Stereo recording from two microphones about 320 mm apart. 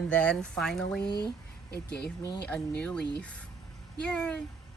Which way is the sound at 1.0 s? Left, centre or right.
Left.